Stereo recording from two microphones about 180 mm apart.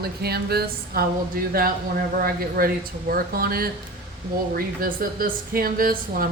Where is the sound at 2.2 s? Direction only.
55° right (ahead or behind).